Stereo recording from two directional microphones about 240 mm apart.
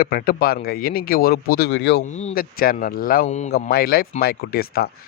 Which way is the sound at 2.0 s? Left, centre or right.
Left.